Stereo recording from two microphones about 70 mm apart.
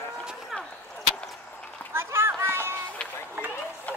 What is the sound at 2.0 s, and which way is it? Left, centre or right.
Children playing, right.